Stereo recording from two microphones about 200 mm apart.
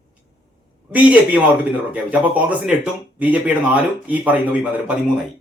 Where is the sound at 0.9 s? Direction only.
5° right (ahead or behind).